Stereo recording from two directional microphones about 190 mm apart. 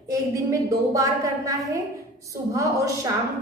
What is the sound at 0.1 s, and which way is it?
A woman's voice, 15° right (ahead or behind).